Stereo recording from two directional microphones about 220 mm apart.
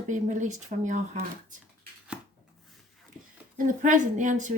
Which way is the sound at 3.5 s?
35° right (ahead or behind).